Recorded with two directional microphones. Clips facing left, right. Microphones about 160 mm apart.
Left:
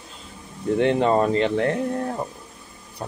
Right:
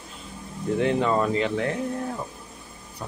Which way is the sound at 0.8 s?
35° left (ahead or behind).